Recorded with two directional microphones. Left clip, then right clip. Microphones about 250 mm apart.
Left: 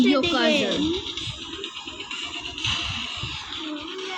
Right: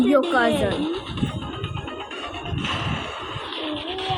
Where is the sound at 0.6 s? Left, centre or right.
Centre.